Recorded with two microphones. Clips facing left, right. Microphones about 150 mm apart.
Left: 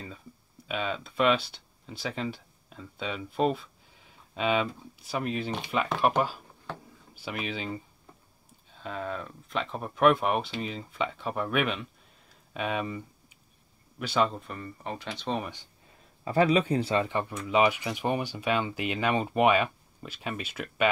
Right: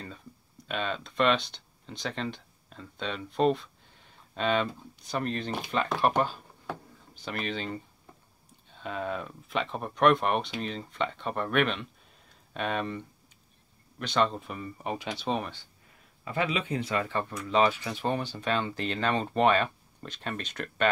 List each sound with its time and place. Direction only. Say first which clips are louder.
0.7 s speech: left 1 dB; 5° left (ahead or behind)
15.4 s speech: left 1 dB; 15° left (ahead or behind)
16.3 s speech: left 7 dB; 40° left (ahead or behind)
17.1 s speech: left 1 dB; 15° left (ahead or behind)